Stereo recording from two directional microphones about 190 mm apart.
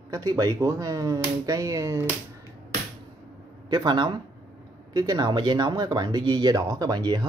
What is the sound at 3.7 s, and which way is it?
A man's voice, 25° right (ahead or behind).